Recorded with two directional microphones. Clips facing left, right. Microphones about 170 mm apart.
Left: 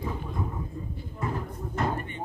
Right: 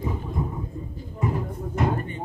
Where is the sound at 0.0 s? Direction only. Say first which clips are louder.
Right 4 dB; 15° right (ahead or behind).